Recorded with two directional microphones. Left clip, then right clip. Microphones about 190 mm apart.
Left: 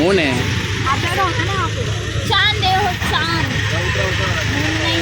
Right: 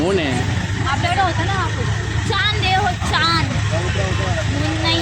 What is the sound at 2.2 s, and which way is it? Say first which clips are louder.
Speech: left 4 dB; 45° left (ahead or behind).